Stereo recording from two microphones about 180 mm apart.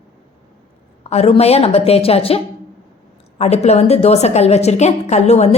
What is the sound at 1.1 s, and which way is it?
A woman's voice, 35° left (ahead or behind).